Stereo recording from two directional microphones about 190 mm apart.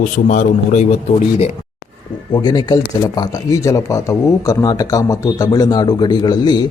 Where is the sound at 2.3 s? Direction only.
25° left (ahead or behind).